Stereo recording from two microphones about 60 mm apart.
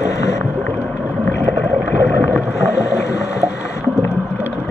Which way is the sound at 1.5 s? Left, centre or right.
Left.